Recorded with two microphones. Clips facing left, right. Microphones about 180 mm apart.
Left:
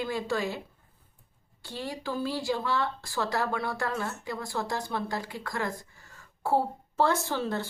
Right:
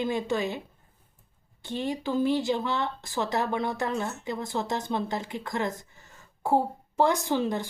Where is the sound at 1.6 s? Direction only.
20° right (ahead or behind).